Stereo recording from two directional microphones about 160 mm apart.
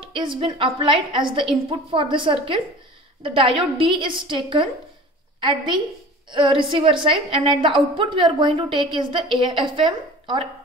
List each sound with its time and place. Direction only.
0.1 s a woman's voice: 30° right (ahead or behind)